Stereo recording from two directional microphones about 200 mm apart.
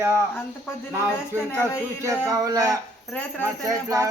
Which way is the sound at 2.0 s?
15° right (ahead or behind).